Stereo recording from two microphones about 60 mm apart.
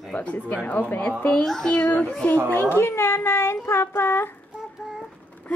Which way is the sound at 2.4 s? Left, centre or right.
Left.